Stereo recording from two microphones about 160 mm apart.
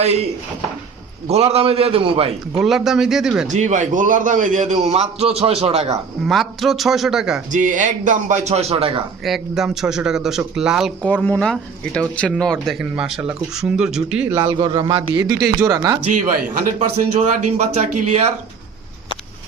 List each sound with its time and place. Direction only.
1.3 s a man's voice: 40° right (ahead or behind)
2.6 s speech: centre (ahead or behind)
3.5 s a man's voice: 50° right (ahead or behind)
6.2 s speech: centre (ahead or behind)
7.5 s a man's voice: 55° right (ahead or behind)
9.2 s speech: centre (ahead or behind)
11.0 s speech: 10° left (ahead or behind); by 14.3 s 5° right (ahead or behind)
14.3 s a man's voice: 30° right (ahead or behind)
15.6 s a man's voice: 20° right (ahead or behind)
16.1 s a man's voice: 55° right (ahead or behind)